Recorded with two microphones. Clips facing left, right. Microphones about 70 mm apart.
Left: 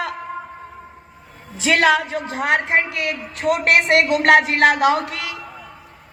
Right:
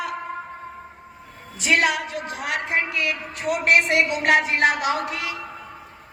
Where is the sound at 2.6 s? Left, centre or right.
Left.